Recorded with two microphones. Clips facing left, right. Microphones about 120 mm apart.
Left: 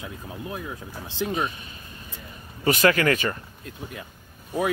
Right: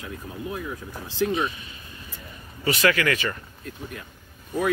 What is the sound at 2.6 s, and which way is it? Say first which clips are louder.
Speech: left 2 dB; 40° left (ahead or behind).